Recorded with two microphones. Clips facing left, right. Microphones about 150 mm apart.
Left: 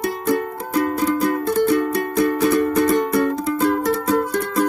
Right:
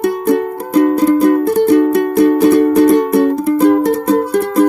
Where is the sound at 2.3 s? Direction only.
45° right (ahead or behind).